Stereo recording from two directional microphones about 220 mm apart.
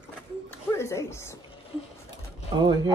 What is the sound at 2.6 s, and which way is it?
Speech, 20° right (ahead or behind).